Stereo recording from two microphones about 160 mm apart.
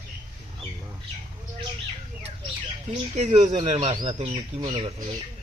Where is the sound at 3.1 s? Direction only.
50° right (ahead or behind).